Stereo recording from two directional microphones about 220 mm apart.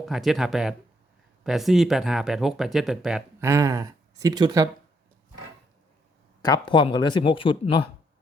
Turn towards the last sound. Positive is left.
turn(degrees=20)  # may be behind; listen again after turning